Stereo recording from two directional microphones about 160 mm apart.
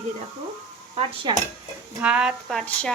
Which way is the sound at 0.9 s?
30° right (ahead or behind).